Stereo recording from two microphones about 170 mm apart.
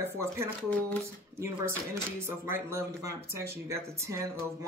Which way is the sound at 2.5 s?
15° right (ahead or behind).